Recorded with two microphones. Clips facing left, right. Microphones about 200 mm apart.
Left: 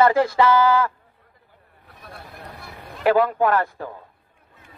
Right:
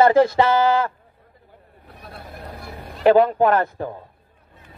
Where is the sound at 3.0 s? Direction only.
25° right (ahead or behind).